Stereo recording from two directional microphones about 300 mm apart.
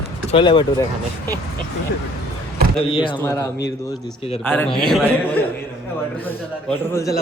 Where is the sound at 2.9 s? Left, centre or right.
Centre.